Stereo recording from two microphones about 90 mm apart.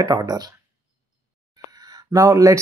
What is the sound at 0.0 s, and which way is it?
Speech, 40° right (ahead or behind).